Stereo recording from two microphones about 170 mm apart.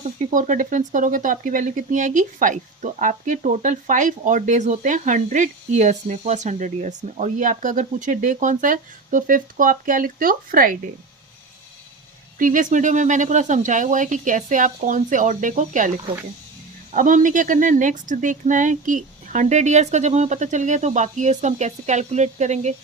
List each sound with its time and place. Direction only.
0.3 s speech: 50° right (ahead or behind)
12.4 s speech: 50° right (ahead or behind)
16.9 s speech: 50° right (ahead or behind)